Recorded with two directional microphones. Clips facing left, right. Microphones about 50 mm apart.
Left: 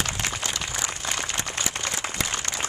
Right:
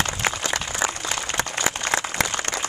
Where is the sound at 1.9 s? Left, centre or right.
Right.